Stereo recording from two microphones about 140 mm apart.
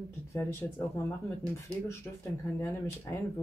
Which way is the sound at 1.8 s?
20° left (ahead or behind).